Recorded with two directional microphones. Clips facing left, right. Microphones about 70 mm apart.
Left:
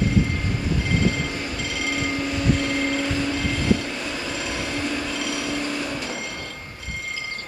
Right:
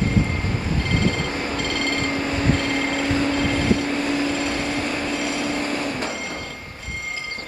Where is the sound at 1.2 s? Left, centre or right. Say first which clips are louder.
Right 4 dB; right.